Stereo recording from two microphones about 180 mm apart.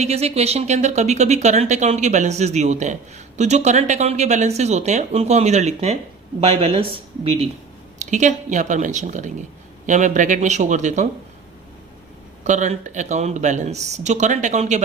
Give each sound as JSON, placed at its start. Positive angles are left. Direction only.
{"t": 0.0, "sound": "speech", "side_deg": -35}
{"t": 7.9, "sound": "speech", "side_deg": -40}
{"t": 12.5, "sound": "speech", "side_deg": -40}